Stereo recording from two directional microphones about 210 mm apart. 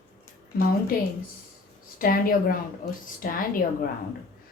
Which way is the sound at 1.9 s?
45° left (ahead or behind).